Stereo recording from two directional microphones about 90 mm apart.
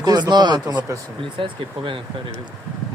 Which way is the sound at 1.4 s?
70° right (ahead or behind).